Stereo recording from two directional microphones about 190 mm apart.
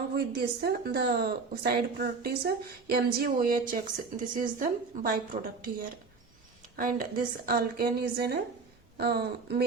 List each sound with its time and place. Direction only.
0.1 s a woman's voice: 55° right (ahead or behind)